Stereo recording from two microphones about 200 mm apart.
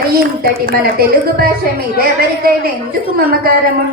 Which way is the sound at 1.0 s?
50° right (ahead or behind).